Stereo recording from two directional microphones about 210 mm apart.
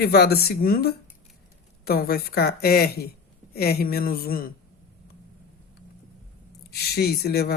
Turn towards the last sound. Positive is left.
turn(degrees=50)  # may be behind; listen again after turning